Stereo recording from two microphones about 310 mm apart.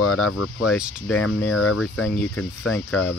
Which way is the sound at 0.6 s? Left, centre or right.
Centre.